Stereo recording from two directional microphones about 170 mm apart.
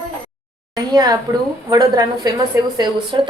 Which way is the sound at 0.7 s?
20° right (ahead or behind).